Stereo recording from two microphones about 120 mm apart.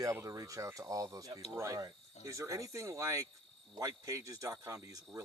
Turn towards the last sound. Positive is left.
turn(degrees=-30)  # may be behind; listen again after turning